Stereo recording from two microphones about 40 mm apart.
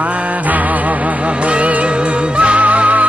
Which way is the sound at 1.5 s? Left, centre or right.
Right.